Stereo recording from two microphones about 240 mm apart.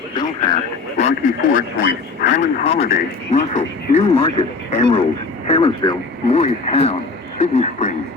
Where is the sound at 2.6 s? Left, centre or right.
Left.